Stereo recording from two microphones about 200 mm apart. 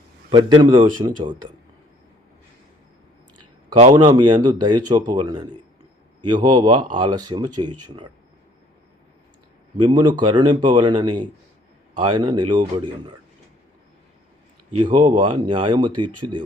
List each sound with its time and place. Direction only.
0.3 s speech: 20° right (ahead or behind)
3.9 s speech: 25° right (ahead or behind)
9.9 s speech: 25° right (ahead or behind)
14.8 s speech: 25° right (ahead or behind)